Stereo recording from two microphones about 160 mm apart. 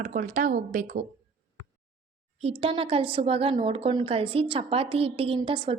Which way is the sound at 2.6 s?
35° right (ahead or behind).